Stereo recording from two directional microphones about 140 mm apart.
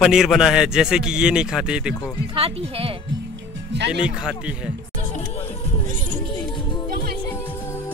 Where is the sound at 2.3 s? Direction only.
40° right (ahead or behind).